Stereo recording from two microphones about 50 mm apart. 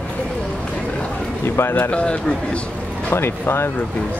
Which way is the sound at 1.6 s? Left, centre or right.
Left.